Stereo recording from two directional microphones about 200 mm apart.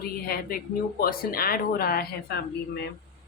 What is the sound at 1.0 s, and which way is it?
A woman's voice, 45° left (ahead or behind).